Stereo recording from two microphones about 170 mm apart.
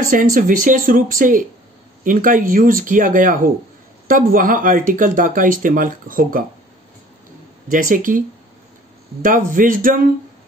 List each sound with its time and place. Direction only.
0.1 s speech: 50° right (ahead or behind)
7.7 s speech: 50° right (ahead or behind)
9.2 s speech: 50° right (ahead or behind)